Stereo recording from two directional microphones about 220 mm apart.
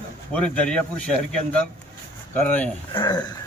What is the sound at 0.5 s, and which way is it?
Speech, 5° left (ahead or behind).